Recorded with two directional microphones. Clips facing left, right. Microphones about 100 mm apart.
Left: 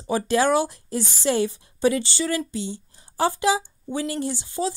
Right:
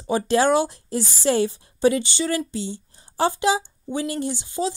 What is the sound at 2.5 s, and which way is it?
A woman's voice, 30° right (ahead or behind).